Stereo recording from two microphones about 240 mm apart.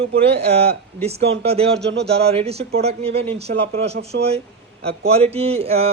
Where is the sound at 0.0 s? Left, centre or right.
Right.